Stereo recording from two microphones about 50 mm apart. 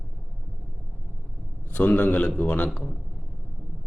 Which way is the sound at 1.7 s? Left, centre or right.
Left.